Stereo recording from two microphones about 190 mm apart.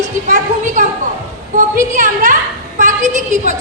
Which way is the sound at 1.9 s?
45° right (ahead or behind).